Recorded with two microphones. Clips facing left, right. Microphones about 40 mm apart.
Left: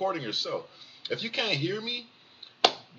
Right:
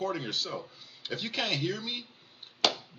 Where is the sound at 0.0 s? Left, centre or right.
Centre.